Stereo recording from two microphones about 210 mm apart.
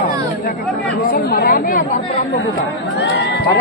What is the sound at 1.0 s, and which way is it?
Speech, 45° left (ahead or behind).